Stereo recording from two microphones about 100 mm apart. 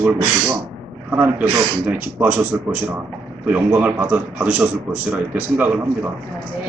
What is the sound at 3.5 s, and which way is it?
Speech, 15° right (ahead or behind).